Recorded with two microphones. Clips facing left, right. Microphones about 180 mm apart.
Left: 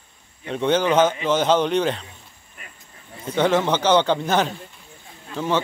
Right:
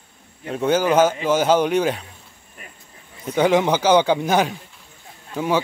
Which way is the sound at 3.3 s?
10° right (ahead or behind).